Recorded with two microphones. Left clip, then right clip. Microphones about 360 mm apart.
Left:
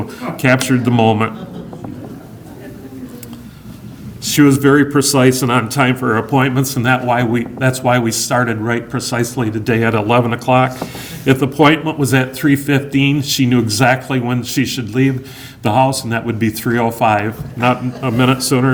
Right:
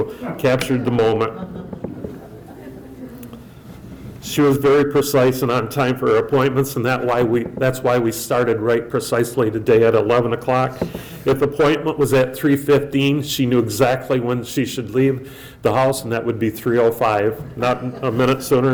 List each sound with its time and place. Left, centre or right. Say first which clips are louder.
0.2 s a man's voice: left 6 dB; left
4.2 s a man's voice: left 4 dB; left